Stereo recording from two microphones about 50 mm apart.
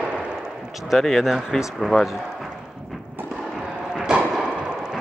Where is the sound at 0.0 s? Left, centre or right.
Centre.